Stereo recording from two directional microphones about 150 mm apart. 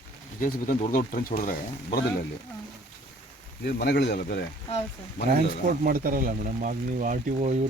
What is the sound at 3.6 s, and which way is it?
Speech, 90° left.